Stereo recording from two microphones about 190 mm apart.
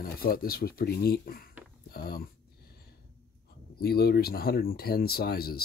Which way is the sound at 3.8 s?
55° left (ahead or behind).